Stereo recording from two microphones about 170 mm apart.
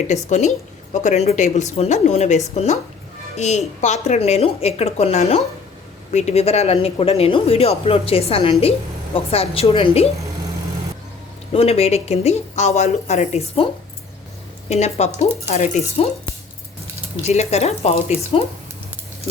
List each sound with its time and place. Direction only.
0.1 s a woman's voice: 45° left (ahead or behind)
11.5 s speech: 35° left (ahead or behind)
14.7 s speech: 40° left (ahead or behind)
17.2 s speech: 40° left (ahead or behind)